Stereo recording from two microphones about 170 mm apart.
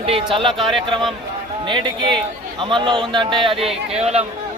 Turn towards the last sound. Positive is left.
turn(degrees=-40)  # may be behind; listen again after turning